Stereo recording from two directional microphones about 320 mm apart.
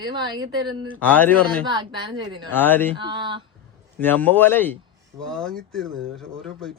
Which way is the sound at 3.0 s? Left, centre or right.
Centre.